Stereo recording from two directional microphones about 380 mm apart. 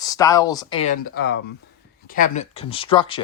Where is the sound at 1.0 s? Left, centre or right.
Left.